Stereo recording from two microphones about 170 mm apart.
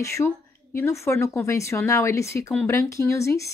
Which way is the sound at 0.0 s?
15° left (ahead or behind).